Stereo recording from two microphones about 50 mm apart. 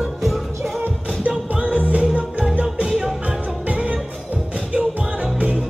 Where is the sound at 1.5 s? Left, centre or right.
Right.